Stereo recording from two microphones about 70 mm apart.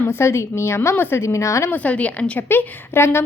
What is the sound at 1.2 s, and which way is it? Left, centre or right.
Speech, left.